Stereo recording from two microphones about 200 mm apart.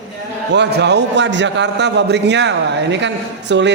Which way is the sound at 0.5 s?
60° right (ahead or behind).